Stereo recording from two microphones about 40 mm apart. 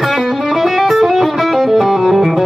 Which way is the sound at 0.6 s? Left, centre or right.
Centre.